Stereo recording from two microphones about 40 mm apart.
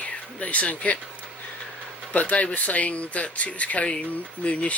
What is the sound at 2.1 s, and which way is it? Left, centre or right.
Speech, left.